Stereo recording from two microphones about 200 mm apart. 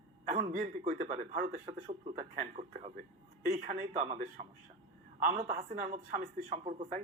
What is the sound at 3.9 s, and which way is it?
A man's voice, 25° right (ahead or behind).